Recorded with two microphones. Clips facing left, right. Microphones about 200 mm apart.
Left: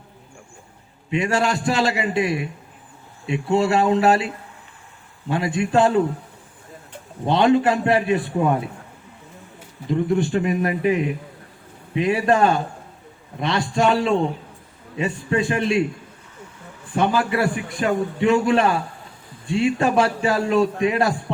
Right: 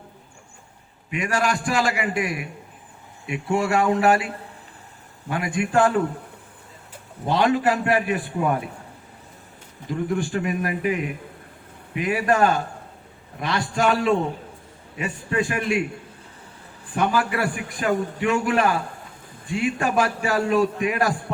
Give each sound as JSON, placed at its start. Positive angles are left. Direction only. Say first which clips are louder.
{"t": 1.1, "sound": "a man's voice", "louder": "left 3 dB", "side_deg": 25}
{"t": 5.3, "sound": "a man's voice", "louder": "left 3 dB", "side_deg": 25}
{"t": 7.3, "sound": "a man's voice", "louder": "left 3 dB", "side_deg": 25}
{"t": 9.9, "sound": "a man's voice", "louder": "left 5 dB", "side_deg": 25}
{"t": 16.9, "sound": "a man's voice", "louder": "left 2 dB", "side_deg": 25}